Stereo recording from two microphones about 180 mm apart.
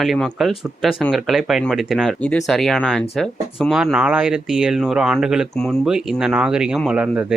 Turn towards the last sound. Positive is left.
turn(degrees=-5)  # may be behind; listen again after turning